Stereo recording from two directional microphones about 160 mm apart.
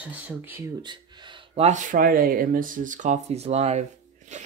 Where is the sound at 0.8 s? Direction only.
30° right (ahead or behind).